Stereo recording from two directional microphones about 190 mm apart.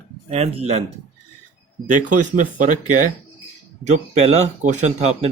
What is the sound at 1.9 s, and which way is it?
Speech, 45° right (ahead or behind).